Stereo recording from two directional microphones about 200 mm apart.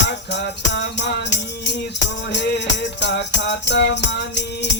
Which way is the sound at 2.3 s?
60° left (ahead or behind).